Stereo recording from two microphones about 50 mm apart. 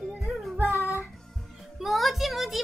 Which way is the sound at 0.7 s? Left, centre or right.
Left.